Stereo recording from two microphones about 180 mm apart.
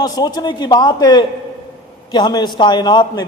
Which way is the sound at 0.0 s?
20° left (ahead or behind).